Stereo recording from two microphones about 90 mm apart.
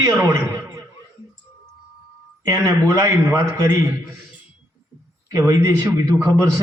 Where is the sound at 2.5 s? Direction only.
35° right (ahead or behind).